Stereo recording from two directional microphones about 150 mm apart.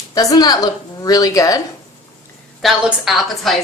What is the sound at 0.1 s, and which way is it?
Speech, 25° left (ahead or behind).